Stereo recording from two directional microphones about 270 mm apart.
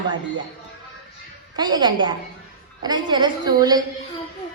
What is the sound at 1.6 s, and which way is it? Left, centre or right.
A woman's voice, centre.